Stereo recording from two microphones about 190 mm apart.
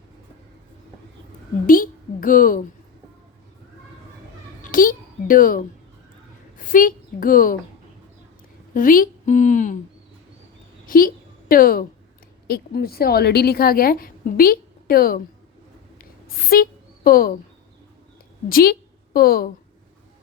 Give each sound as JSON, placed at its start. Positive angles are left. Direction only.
{"t": 1.6, "sound": "a woman's voice", "side_deg": 45}
{"t": 4.6, "sound": "a sound", "side_deg": 45}
{"t": 6.7, "sound": "a woman's voice", "side_deg": 45}
{"t": 8.7, "sound": "a woman's voice", "side_deg": 45}
{"t": 10.8, "sound": "a woman's voice", "side_deg": 50}
{"t": 16.0, "sound": "a sound", "side_deg": 50}
{"t": 18.4, "sound": "a woman's voice", "side_deg": 50}